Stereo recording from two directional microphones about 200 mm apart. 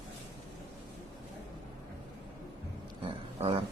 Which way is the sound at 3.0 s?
25° right (ahead or behind).